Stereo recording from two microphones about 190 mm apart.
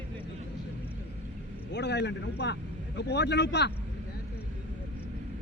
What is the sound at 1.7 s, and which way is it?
A man's voice, 65° left (ahead or behind).